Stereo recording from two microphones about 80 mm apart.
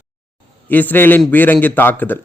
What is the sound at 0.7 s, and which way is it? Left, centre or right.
Speech, left.